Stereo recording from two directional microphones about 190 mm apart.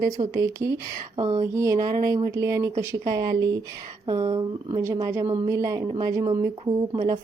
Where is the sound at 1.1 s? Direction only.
25° right (ahead or behind).